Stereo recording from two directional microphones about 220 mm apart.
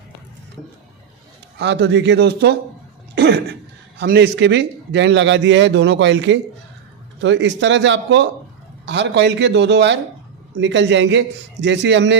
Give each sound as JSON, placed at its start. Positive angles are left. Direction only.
{"t": 1.5, "sound": "a man's voice", "side_deg": -50}
{"t": 4.0, "sound": "a man's voice", "side_deg": -50}